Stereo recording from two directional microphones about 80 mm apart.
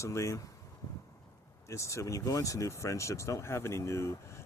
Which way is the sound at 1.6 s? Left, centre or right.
Left.